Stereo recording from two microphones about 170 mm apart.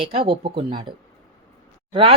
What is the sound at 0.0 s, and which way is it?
Speech, 35° right (ahead or behind).